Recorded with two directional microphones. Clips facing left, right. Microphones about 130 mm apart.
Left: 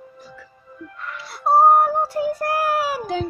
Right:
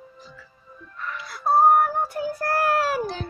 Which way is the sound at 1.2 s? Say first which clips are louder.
Left 3 dB; 30° left (ahead or behind).